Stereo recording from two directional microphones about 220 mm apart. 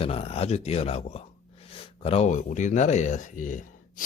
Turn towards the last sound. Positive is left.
turn(degrees=35)  # may be behind; listen again after turning